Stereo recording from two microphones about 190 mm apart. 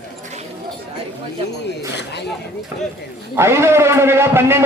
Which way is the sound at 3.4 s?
15° right (ahead or behind).